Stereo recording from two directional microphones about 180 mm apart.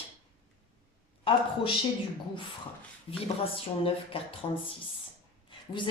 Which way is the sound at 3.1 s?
30° left (ahead or behind).